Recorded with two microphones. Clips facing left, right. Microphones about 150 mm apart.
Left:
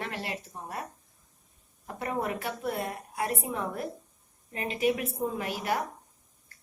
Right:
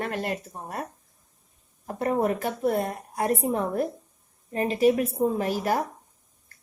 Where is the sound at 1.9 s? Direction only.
40° right (ahead or behind).